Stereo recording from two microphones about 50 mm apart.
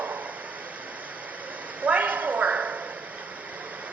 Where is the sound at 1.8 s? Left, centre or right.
Right.